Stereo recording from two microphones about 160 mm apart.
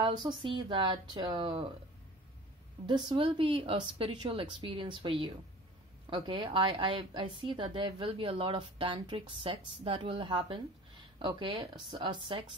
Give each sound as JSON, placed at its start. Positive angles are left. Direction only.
{"t": 0.0, "sound": "a woman's voice", "side_deg": -30}
{"t": 2.9, "sound": "a woman's voice", "side_deg": -30}